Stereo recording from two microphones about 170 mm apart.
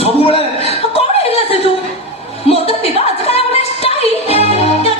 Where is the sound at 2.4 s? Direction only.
35° left (ahead or behind).